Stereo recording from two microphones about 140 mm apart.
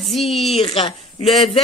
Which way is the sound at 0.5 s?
40° left (ahead or behind).